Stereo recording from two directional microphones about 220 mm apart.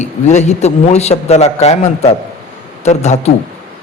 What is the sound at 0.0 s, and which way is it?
A man's voice, 30° left (ahead or behind).